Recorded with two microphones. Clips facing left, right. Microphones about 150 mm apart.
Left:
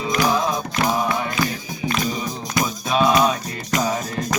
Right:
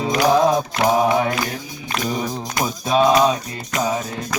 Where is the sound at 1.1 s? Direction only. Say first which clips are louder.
Right 6 dB; 65° right (ahead or behind).